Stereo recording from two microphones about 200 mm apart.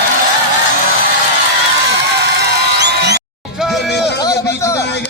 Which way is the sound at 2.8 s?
55° right (ahead or behind).